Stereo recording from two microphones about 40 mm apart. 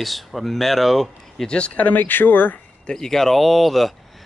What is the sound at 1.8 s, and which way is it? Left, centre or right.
Speech, left.